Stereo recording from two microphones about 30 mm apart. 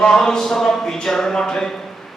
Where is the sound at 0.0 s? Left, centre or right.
Centre.